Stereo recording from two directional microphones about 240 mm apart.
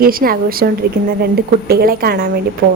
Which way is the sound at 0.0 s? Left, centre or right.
Right.